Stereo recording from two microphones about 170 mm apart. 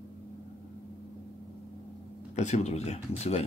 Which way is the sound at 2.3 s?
40° left (ahead or behind).